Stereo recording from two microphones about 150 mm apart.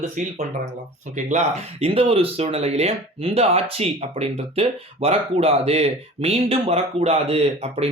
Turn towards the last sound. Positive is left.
turn(degrees=-40)  # may be behind; listen again after turning